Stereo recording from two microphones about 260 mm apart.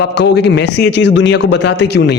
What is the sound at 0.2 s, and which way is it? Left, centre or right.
A man's voice, left.